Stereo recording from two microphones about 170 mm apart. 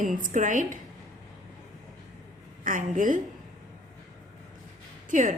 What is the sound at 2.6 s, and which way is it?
Speech, 50° right (ahead or behind).